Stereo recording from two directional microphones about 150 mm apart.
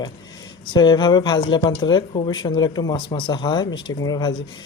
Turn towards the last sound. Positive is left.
turn(degrees=25)  # may be behind; listen again after turning